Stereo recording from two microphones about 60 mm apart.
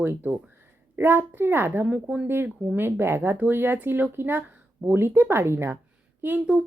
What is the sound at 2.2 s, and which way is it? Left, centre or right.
Speech, right.